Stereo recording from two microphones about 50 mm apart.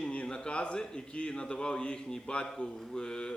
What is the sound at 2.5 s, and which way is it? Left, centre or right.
Mantra, centre.